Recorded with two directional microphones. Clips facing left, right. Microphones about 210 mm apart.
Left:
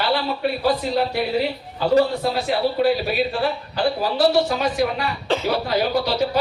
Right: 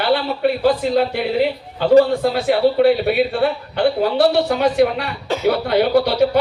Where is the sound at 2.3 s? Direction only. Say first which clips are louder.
Right 6 dB; 60° right (ahead or behind).